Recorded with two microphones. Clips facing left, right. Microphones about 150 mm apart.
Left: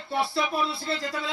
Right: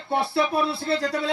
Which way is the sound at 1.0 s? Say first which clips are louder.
Right 6 dB; 70° right (ahead or behind).